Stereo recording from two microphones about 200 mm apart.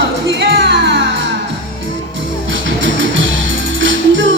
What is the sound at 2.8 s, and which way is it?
Music, 70° right (ahead or behind).